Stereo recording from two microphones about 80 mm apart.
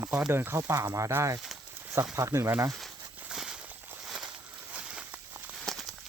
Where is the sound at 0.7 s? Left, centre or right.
Right.